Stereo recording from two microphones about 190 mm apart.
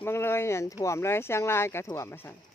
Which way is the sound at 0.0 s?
10° left (ahead or behind).